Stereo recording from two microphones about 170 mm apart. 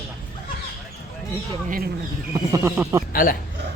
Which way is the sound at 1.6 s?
55° right (ahead or behind).